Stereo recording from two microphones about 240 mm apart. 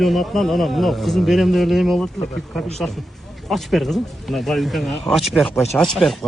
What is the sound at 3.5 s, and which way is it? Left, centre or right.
A man's voice, centre.